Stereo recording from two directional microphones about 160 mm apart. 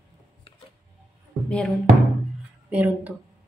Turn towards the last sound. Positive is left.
turn(degrees=-10)  # may be behind; listen again after turning